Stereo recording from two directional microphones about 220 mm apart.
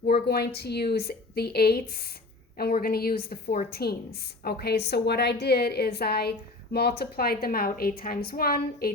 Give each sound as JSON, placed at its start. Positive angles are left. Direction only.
{"t": 0.0, "sound": "a woman's voice", "side_deg": 45}